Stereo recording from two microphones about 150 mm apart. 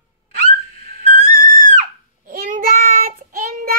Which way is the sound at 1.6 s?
60° right (ahead or behind).